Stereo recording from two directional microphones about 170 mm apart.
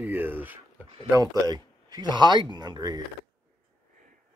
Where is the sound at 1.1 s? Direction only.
20° right (ahead or behind).